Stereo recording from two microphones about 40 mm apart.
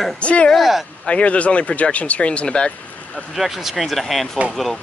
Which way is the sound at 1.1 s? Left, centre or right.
Left.